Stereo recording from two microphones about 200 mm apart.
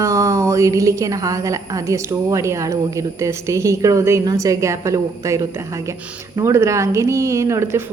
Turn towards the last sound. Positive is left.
turn(degrees=-15)  # may be behind; listen again after turning